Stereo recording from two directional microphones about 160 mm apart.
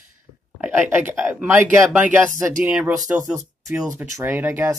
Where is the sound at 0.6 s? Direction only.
10° right (ahead or behind).